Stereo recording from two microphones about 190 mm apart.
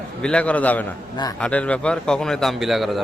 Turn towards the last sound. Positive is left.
turn(degrees=0)  # may be behind; listen again after turning